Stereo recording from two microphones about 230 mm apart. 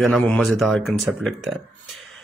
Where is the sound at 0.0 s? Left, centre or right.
Centre.